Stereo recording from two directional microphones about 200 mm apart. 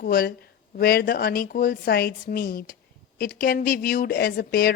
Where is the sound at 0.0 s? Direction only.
50° left (ahead or behind).